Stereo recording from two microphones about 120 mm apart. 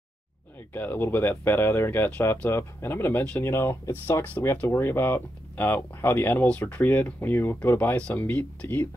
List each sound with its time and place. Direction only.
0.7 s speech: 15° left (ahead or behind)